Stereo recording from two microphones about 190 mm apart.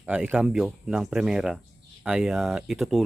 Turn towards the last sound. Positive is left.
turn(degrees=0)  # may be behind; listen again after turning